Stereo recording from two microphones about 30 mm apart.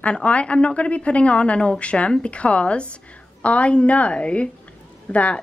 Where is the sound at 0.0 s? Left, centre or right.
Left.